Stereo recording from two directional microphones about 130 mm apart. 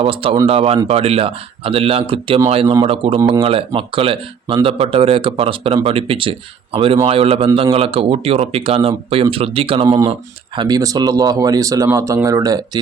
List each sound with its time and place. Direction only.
0.0 s speech: 45° right (ahead or behind)
9.8 s speech: 30° right (ahead or behind)